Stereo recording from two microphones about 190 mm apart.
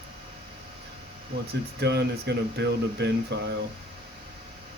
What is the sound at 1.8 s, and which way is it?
Speech, 60° right (ahead or behind).